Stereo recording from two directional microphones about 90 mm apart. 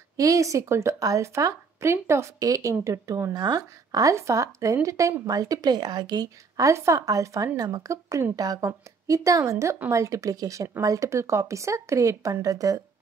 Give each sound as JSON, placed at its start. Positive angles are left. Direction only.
{"t": 0.2, "sound": "speech", "side_deg": -35}
{"t": 3.3, "sound": "speech", "side_deg": -45}